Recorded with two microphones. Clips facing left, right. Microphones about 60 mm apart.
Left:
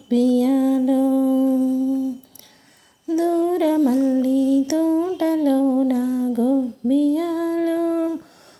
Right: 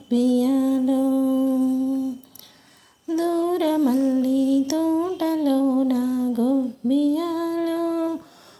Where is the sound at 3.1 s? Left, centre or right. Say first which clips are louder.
Left 3 dB; left.